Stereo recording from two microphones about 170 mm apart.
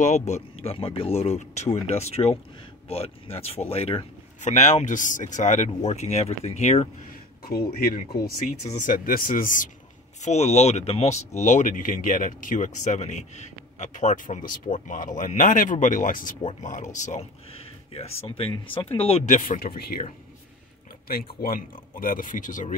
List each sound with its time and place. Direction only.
0.0 s speech: 40° left (ahead or behind)
7.8 s speech: 60° left (ahead or behind)
10.2 s speech: 40° left (ahead or behind)
17.9 s speech: 35° left (ahead or behind); by 19.7 s 50° left (ahead or behind)
21.4 s speech: 55° left (ahead or behind)